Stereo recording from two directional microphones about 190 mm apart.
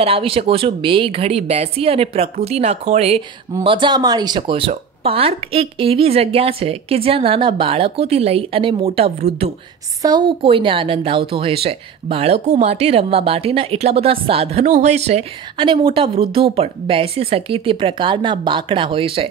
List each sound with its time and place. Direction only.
0.0 s a woman's voice: 30° right (ahead or behind)
10.0 s a woman's voice: 25° right (ahead or behind)